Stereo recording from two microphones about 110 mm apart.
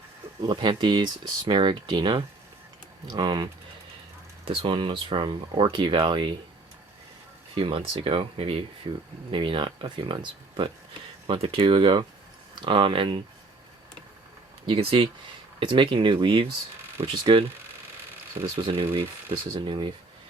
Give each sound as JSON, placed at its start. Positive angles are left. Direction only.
{"t": 0.4, "sound": "speech", "side_deg": -45}
{"t": 7.5, "sound": "speech", "side_deg": -55}
{"t": 14.7, "sound": "speech", "side_deg": -55}
{"t": 18.4, "sound": "speech", "side_deg": -50}